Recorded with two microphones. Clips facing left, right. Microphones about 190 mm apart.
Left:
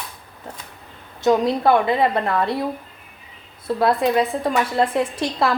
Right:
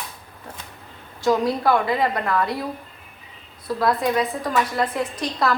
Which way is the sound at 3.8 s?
25° left (ahead or behind).